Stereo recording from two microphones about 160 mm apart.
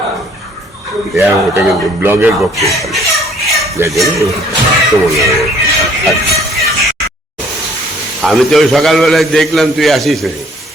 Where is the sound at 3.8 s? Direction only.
15° right (ahead or behind).